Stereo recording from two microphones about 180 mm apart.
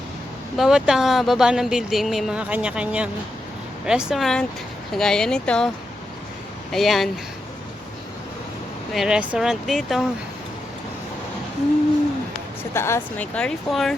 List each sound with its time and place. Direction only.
0.5 s speech: centre (ahead or behind)
8.9 s speech: centre (ahead or behind)
12.7 s speech: 15° left (ahead or behind)